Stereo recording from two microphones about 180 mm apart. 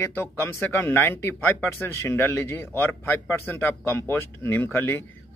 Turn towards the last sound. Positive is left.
turn(degrees=10)  # may be behind; listen again after turning